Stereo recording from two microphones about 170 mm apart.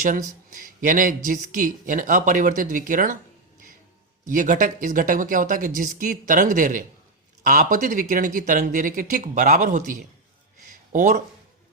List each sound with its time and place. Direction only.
0.0 s speech: 50° right (ahead or behind)
4.3 s speech: 50° right (ahead or behind)
10.7 s a sound: 50° right (ahead or behind)